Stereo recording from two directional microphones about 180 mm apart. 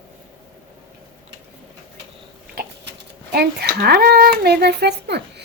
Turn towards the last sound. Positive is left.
turn(degrees=-65)  # may be behind; listen again after turning